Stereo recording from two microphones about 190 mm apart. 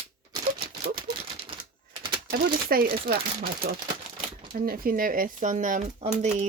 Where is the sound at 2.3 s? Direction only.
50° right (ahead or behind).